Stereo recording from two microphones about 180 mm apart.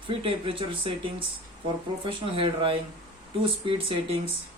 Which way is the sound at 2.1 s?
30° right (ahead or behind).